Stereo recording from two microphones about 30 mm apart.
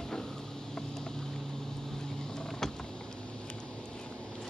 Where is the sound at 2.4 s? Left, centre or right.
Centre.